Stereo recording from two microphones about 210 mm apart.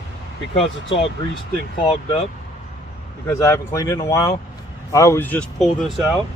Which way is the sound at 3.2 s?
15° left (ahead or behind).